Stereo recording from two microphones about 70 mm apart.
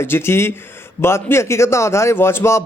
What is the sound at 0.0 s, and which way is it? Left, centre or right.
A man's voice, left.